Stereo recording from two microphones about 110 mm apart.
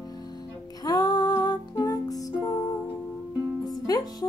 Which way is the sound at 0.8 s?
35° left (ahead or behind).